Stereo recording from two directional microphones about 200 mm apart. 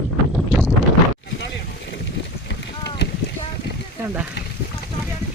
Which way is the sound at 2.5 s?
55° left (ahead or behind).